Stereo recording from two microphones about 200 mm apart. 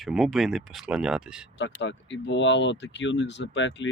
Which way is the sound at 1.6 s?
65° left (ahead or behind).